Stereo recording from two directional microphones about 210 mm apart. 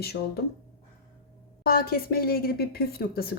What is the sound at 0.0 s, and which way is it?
Speech, 50° left (ahead or behind).